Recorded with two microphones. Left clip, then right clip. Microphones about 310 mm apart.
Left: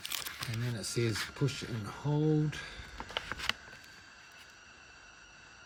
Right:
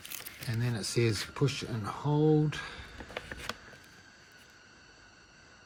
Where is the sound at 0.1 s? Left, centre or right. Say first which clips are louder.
Left 6 dB; centre.